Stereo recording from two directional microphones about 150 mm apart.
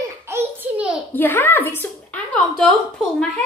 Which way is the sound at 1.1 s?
15° left (ahead or behind).